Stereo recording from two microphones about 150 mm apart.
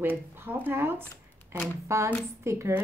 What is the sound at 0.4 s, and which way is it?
A woman's voice, 15° right (ahead or behind).